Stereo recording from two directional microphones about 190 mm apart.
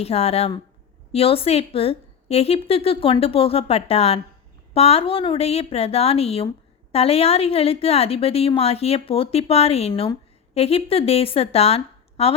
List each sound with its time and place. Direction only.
0.0 s a woman's voice: 30° left (ahead or behind)